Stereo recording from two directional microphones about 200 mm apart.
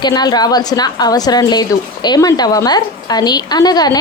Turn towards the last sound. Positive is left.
turn(degrees=20)  # may be behind; listen again after turning